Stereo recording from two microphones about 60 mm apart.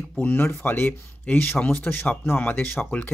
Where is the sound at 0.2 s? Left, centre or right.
Left.